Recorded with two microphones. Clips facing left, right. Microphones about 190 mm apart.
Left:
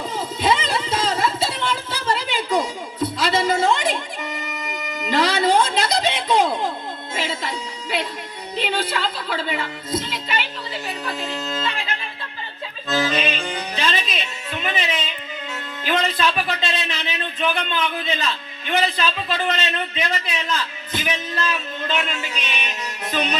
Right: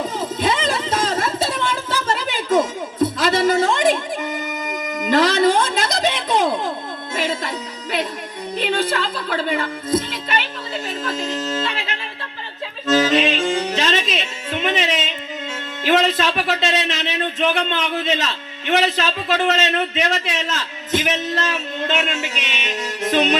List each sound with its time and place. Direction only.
0.2 s music: 45° right (ahead or behind)
8.5 s speech: 45° right (ahead or behind)
12.9 s music: 85° right
15.8 s a sound: 90° right
18.7 s speech: 85° right
21.8 s music: 80° right